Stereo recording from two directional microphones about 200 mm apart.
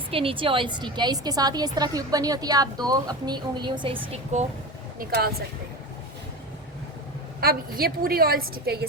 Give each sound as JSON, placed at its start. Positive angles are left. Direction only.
{"t": 0.1, "sound": "a woman's voice", "side_deg": -25}
{"t": 4.9, "sound": "a woman's voice", "side_deg": -50}
{"t": 7.4, "sound": "a woman's voice", "side_deg": -50}